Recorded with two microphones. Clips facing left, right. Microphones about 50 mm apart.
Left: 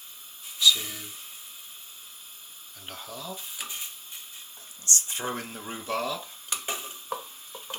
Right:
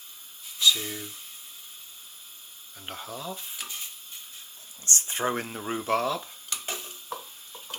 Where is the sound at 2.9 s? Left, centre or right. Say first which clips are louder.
Right 3 dB; right.